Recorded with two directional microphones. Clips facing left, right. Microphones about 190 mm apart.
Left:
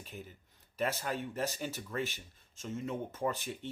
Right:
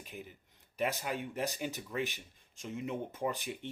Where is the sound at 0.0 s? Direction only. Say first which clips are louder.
Even; 15° right (ahead or behind).